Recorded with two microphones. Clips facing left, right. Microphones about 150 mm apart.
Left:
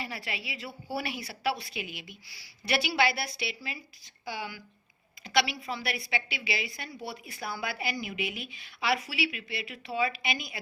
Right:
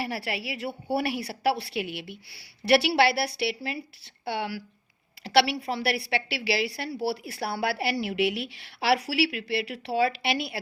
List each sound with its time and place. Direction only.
0.0 s a woman's voice: 70° right (ahead or behind)